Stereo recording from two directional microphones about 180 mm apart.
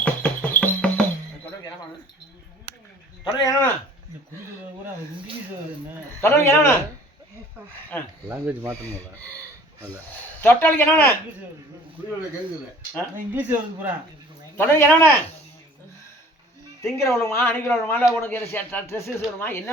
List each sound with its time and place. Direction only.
0.0 s music: 10° left (ahead or behind)
3.2 s speech: 20° left (ahead or behind)
6.2 s speech: 15° left (ahead or behind)
7.9 s speech: 10° left (ahead or behind)
8.3 s speech: 15° right (ahead or behind)
8.8 s speech: 10° left (ahead or behind)
10.4 s speech: 10° left (ahead or behind)
13.3 s speech: 10° right (ahead or behind)
14.5 s speech: 15° left (ahead or behind)
16.8 s speech: 15° left (ahead or behind)